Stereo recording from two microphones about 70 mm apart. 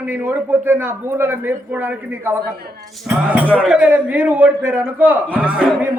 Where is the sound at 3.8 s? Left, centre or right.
Right.